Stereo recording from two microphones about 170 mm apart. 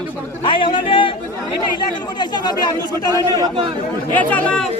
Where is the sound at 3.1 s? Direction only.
20° right (ahead or behind).